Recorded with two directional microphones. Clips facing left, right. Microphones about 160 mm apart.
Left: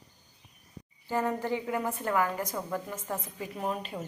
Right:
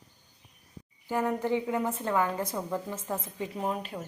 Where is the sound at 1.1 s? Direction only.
15° right (ahead or behind).